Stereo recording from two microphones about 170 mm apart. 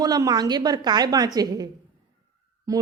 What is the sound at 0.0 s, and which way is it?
Speech, 20° right (ahead or behind).